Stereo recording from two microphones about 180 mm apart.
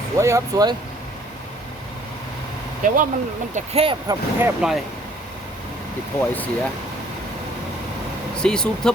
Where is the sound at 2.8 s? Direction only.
50° right (ahead or behind).